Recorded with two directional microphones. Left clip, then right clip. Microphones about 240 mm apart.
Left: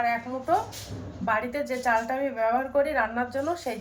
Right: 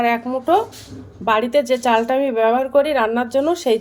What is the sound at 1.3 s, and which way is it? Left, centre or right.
Speech, right.